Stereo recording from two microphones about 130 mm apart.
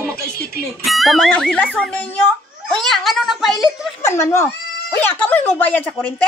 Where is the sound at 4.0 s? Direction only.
20° left (ahead or behind).